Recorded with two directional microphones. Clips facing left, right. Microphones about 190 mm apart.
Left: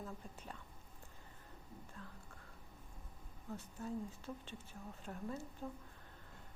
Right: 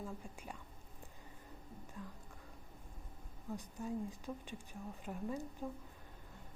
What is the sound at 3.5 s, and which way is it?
Speech, 15° right (ahead or behind).